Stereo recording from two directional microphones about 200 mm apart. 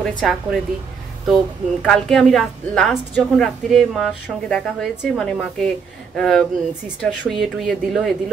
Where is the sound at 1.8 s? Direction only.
Centre (ahead or behind).